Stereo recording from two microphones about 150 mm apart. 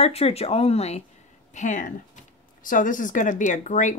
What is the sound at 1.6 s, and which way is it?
Speech, 60° left (ahead or behind).